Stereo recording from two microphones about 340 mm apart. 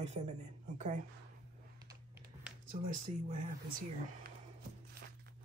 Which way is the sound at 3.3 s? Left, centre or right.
Right.